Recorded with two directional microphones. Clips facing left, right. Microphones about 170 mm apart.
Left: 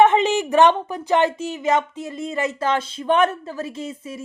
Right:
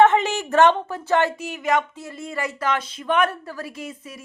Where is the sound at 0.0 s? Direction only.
20° left (ahead or behind).